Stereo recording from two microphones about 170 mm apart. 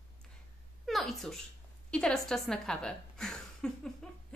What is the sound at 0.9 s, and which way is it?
A woman's voice, centre (ahead or behind).